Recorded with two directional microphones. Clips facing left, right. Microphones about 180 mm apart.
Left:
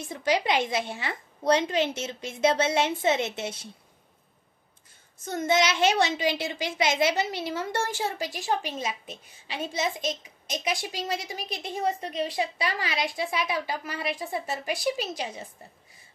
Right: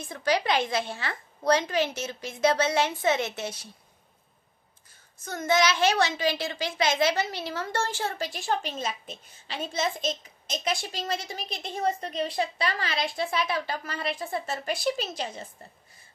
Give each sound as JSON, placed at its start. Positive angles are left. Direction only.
{"t": 0.1, "sound": "a woman's voice", "side_deg": 20}
{"t": 5.2, "sound": "a child's voice", "side_deg": 25}